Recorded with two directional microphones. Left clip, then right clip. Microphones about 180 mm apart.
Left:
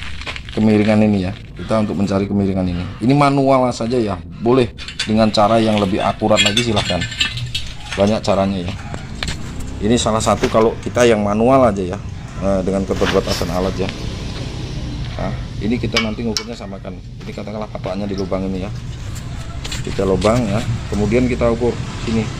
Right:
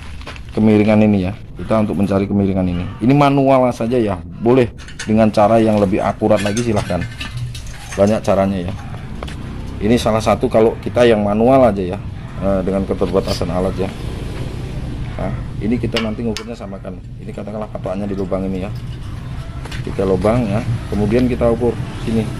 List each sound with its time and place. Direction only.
0.6 s speech: 10° right (ahead or behind)
6.7 s speech: centre (ahead or behind)
8.1 s speech: 5° right (ahead or behind)
9.8 s speech: centre (ahead or behind)
15.2 s speech: 5° right (ahead or behind)
17.4 s speech: 5° right (ahead or behind)
20.0 s speech: 10° left (ahead or behind)